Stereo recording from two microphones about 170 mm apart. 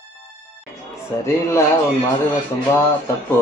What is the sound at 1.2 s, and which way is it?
Speech, 15° left (ahead or behind).